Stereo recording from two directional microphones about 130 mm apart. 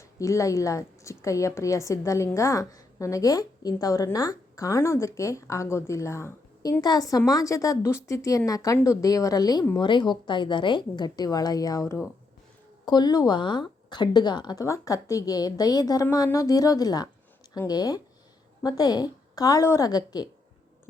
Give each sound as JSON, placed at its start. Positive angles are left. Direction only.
{"t": 0.0, "sound": "a woman's voice", "side_deg": 25}